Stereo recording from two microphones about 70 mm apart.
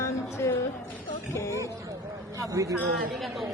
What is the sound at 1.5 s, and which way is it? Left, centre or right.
Speech, right.